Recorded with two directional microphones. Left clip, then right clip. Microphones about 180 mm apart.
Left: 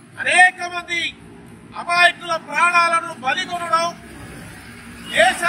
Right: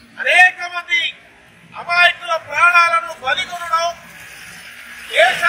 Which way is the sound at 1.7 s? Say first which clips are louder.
Right 2 dB; 30° left (ahead or behind).